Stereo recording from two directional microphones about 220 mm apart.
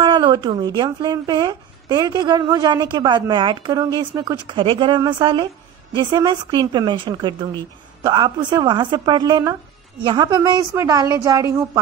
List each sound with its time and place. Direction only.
0.0 s a woman's voice: 20° right (ahead or behind)